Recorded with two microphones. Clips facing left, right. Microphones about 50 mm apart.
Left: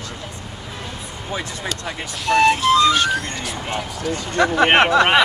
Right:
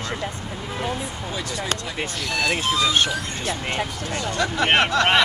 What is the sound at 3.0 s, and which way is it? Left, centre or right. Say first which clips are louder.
Speech: left 3 dB; right.